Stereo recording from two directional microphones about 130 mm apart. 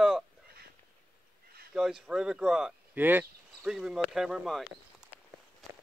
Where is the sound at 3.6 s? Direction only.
5° right (ahead or behind).